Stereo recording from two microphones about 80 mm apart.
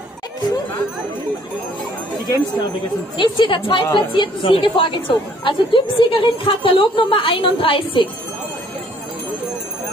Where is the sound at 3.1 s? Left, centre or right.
Left.